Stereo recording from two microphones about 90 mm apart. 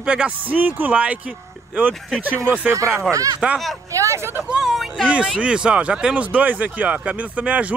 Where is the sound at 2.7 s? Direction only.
35° right (ahead or behind).